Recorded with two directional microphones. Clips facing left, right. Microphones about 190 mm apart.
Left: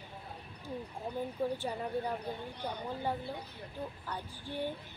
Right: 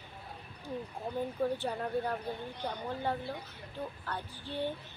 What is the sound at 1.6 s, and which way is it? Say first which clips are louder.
Speech: right 2 dB; 10° left (ahead or behind).